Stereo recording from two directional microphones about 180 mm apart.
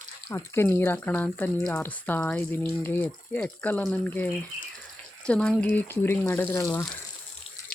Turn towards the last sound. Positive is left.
turn(degrees=15)  # may be behind; listen again after turning